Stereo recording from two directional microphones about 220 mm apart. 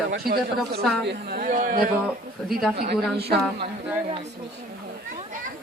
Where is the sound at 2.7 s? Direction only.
45° right (ahead or behind).